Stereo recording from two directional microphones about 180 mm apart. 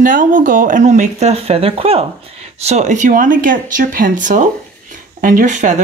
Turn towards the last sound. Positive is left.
turn(degrees=-45)  # may be behind; listen again after turning